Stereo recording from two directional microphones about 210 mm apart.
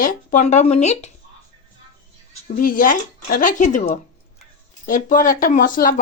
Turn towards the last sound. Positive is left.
turn(degrees=40)  # may be behind; listen again after turning